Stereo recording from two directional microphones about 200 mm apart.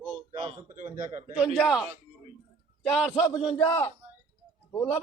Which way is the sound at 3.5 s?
20° left (ahead or behind).